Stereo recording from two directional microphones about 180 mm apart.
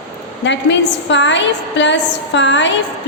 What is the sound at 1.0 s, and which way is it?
A woman's voice, 90° left.